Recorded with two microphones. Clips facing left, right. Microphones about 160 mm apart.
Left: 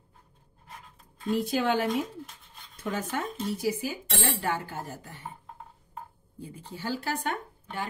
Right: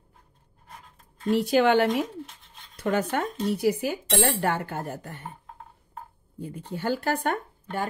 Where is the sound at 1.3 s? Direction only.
75° right (ahead or behind).